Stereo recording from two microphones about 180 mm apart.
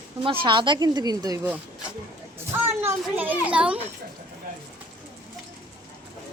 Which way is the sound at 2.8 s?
10° right (ahead or behind).